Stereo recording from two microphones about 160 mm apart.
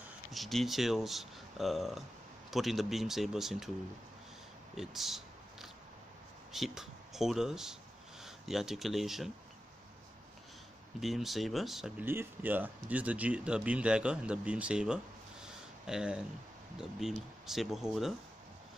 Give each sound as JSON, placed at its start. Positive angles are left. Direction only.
{"t": 0.3, "sound": "speech", "side_deg": 0}
{"t": 4.7, "sound": "a sound", "side_deg": 0}
{"t": 6.5, "sound": "speech", "side_deg": 0}
{"t": 11.0, "sound": "speech", "side_deg": 0}
{"t": 12.0, "sound": "speech", "side_deg": -10}
{"t": 15.4, "sound": "a sound", "side_deg": -5}
{"t": 17.0, "sound": "speech", "side_deg": 0}